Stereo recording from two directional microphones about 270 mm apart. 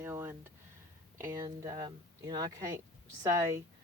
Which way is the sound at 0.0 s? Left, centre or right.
Centre.